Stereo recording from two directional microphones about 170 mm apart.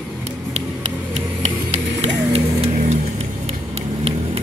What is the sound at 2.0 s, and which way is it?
Vehicle, 40° right (ahead or behind).